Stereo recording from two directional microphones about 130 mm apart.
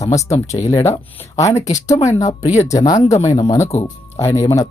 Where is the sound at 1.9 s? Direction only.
65° left (ahead or behind).